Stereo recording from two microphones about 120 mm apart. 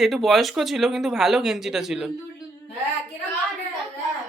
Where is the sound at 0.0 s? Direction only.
Centre (ahead or behind).